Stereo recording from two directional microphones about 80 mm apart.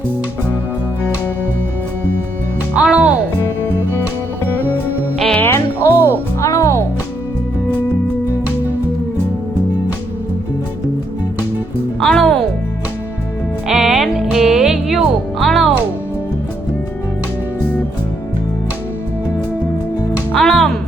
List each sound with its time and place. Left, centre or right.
2.7 s music: centre
5.4 s music: left
11.9 s music: centre
13.7 s music: centre
20.3 s music: centre